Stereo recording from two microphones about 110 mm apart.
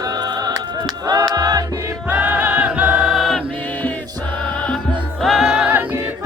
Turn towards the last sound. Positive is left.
turn(degrees=-15)  # may be behind; listen again after turning